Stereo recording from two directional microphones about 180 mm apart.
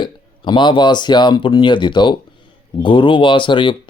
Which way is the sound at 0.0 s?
25° left (ahead or behind).